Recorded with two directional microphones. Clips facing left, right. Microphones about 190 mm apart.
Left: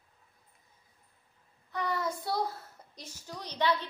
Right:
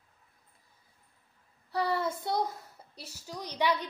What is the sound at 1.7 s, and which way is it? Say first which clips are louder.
A child's voice: right 3 dB; 30° right (ahead or behind).